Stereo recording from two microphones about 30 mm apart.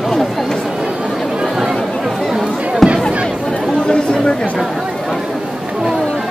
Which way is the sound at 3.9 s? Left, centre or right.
Left.